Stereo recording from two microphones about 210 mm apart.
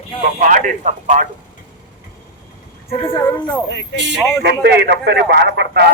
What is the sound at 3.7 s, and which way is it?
Speech, 55° left (ahead or behind).